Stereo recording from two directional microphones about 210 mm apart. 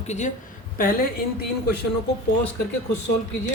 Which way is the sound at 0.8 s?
40° left (ahead or behind).